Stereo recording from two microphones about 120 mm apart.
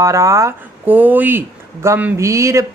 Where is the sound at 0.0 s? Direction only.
25° right (ahead or behind).